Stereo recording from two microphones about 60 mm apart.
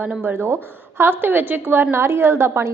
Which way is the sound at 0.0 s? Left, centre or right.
Right.